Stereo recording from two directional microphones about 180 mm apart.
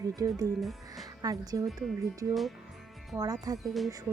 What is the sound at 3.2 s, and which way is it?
Speech, 20° right (ahead or behind).